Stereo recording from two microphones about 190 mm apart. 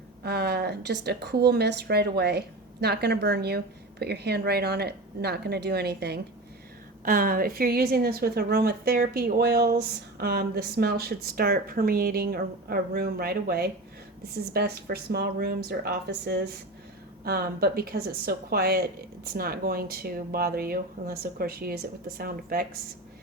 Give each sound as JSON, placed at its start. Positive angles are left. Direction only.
{"t": 0.2, "sound": "a woman's voice", "side_deg": -60}
{"t": 7.0, "sound": "a woman's voice", "side_deg": -45}